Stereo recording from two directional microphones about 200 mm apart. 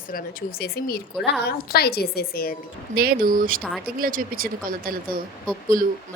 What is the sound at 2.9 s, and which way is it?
Speech, 50° right (ahead or behind).